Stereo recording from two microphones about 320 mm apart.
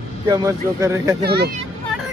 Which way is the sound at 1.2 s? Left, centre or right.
Right.